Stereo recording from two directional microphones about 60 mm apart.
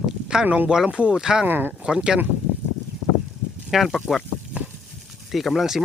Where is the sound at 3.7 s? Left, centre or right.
Centre.